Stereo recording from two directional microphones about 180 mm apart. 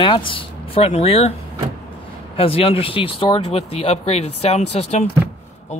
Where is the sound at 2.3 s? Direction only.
30° left (ahead or behind).